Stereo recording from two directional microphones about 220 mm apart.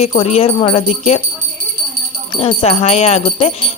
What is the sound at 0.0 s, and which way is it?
Speech, 30° left (ahead or behind).